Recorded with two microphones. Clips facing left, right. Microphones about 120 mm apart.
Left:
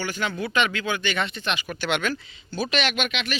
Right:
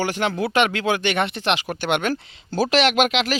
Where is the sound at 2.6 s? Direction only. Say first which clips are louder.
Right 8 dB; 85° right.